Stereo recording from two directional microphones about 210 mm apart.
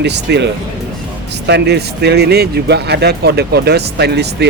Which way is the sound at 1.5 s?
50° right (ahead or behind).